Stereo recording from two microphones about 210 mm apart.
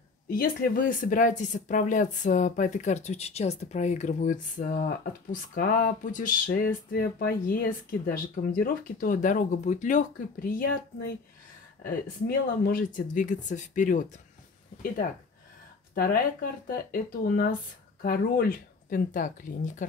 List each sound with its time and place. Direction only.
0.3 s speech: 40° left (ahead or behind)
11.8 s speech: 45° left (ahead or behind)
15.9 s speech: 45° left (ahead or behind)